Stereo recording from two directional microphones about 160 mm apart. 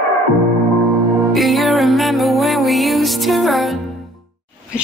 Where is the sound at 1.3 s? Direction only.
Centre (ahead or behind).